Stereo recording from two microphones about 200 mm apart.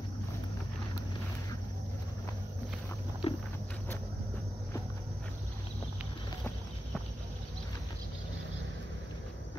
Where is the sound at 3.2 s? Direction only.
30° left (ahead or behind).